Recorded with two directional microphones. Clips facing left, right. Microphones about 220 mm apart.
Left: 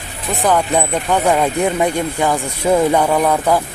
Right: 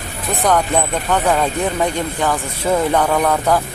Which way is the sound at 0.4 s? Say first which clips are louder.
Left 1 dB; 10° left (ahead or behind).